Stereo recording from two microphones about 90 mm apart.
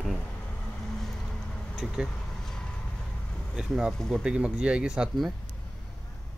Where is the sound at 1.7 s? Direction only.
5° right (ahead or behind).